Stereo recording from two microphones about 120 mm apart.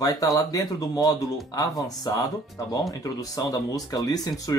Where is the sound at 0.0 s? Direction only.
30° left (ahead or behind).